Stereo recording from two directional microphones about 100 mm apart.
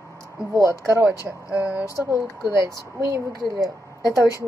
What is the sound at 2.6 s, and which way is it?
Speech, 30° right (ahead or behind).